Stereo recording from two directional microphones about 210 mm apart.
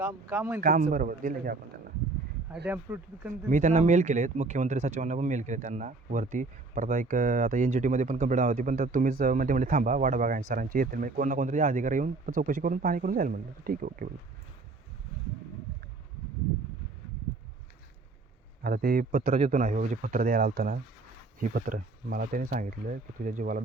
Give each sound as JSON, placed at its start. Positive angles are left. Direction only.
{"t": 0.0, "sound": "speech", "side_deg": -10}
{"t": 0.6, "sound": "speech", "side_deg": -40}
{"t": 2.6, "sound": "speech", "side_deg": -10}
{"t": 3.5, "sound": "speech", "side_deg": -35}
{"t": 18.6, "sound": "speech", "side_deg": -45}